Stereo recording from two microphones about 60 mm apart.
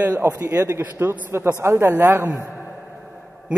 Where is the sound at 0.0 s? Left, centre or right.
Right.